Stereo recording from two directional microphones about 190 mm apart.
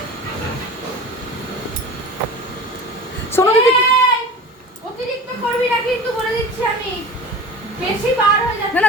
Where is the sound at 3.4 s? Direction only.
15° left (ahead or behind).